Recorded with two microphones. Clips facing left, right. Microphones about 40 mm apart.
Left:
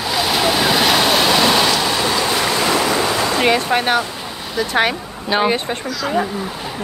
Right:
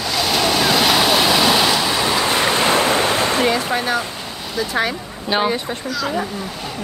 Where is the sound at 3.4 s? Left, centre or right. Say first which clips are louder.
Left 3 dB; left.